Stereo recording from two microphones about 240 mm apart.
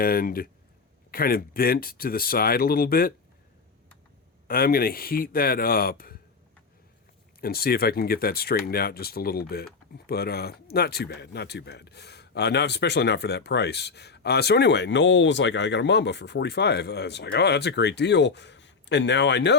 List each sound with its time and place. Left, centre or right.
0.0 s speech: left
4.4 s speech: left
7.4 s speech: left